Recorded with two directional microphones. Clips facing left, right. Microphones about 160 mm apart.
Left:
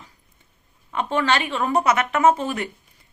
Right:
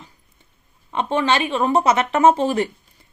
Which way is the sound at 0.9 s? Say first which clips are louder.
Right 2 dB; 25° right (ahead or behind).